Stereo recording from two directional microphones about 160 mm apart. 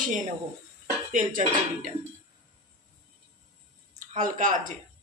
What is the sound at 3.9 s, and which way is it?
Speech, 55° right (ahead or behind).